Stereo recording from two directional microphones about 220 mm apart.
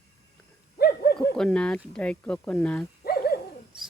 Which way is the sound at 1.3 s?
5° left (ahead or behind).